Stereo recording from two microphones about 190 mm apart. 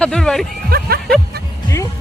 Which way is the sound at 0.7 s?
50° right (ahead or behind).